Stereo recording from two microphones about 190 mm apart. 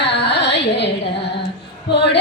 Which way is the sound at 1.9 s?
65° left (ahead or behind).